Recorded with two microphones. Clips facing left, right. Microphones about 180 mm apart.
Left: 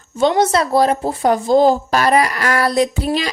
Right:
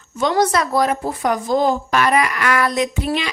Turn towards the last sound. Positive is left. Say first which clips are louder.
# left 3 dB
turn(degrees=35)  # may be behind; listen again after turning